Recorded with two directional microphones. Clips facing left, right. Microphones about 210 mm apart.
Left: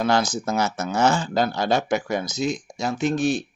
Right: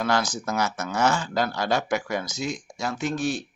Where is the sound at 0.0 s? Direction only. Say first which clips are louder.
Left 4 dB; 25° left (ahead or behind).